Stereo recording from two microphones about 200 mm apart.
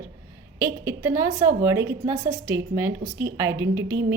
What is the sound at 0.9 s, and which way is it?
A woman's voice, 10° right (ahead or behind).